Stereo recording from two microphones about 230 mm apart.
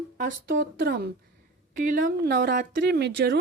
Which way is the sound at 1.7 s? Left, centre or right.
Right.